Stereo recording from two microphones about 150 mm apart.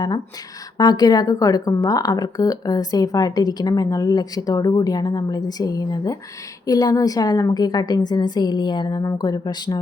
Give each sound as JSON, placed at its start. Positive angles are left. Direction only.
{"t": 0.8, "sound": "a woman's voice", "side_deg": 25}